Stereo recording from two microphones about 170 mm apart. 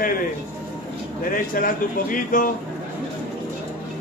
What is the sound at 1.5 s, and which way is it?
Speech, 55° left (ahead or behind).